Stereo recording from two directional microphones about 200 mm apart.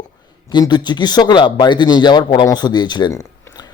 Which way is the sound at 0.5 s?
20° left (ahead or behind).